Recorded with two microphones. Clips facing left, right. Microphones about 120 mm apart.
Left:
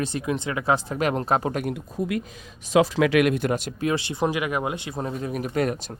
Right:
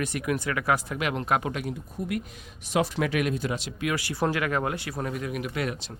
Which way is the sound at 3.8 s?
25° left (ahead or behind).